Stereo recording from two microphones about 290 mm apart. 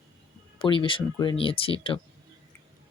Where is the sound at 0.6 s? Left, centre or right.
Centre.